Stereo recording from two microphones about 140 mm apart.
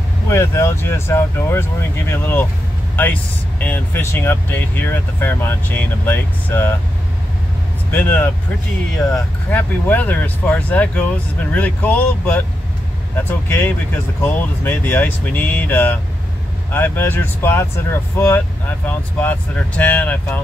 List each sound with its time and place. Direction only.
0.3 s speech: 20° left (ahead or behind)
7.9 s speech: 10° left (ahead or behind)
18.9 s speech: 10° left (ahead or behind)